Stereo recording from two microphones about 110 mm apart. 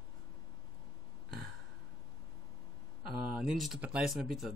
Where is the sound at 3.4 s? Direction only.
5° right (ahead or behind).